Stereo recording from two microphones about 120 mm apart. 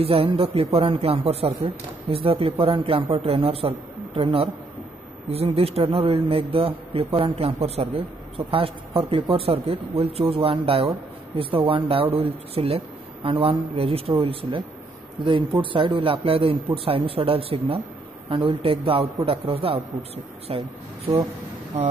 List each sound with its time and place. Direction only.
0.0 s a man's voice: 50° right (ahead or behind)